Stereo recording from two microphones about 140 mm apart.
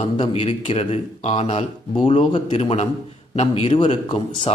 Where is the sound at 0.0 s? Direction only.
45° left (ahead or behind).